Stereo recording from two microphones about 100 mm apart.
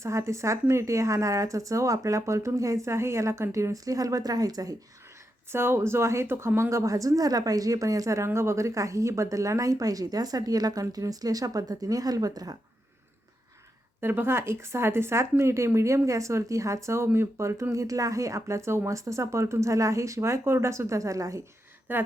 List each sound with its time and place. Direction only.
0.0 s speech: 30° right (ahead or behind)
5.5 s speech: 25° right (ahead or behind); by 12.5 s 40° right (ahead or behind)
14.0 s speech: 20° right (ahead or behind)
21.9 s speech: 20° right (ahead or behind)